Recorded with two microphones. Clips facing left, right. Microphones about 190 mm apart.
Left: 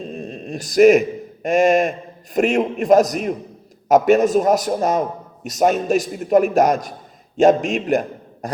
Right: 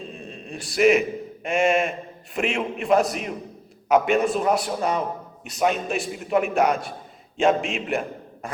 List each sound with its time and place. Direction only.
0.0 s a man's voice: 40° left (ahead or behind)